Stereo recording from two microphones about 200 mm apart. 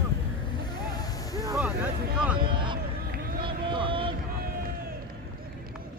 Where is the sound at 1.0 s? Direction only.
20° left (ahead or behind).